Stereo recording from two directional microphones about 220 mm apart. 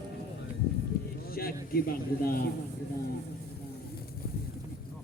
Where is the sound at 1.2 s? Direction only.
45° left (ahead or behind).